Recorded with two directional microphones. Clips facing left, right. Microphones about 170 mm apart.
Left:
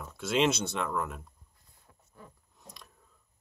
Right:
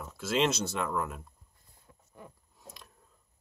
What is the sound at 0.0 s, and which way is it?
Speech, centre (ahead or behind).